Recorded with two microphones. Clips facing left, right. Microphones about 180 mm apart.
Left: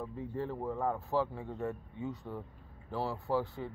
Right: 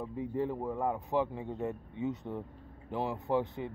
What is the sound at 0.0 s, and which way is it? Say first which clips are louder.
Speech: right 4 dB; 15° right (ahead or behind).